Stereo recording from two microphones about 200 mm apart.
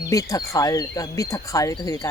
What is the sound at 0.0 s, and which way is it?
Speech, 15° left (ahead or behind).